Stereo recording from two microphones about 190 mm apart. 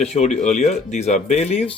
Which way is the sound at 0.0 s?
35° left (ahead or behind).